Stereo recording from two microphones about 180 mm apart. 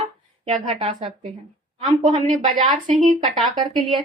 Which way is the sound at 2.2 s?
45° right (ahead or behind).